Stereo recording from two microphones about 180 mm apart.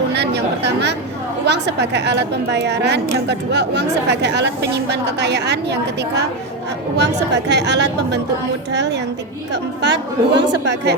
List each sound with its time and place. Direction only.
0.1 s a woman's voice: 70° right (ahead or behind)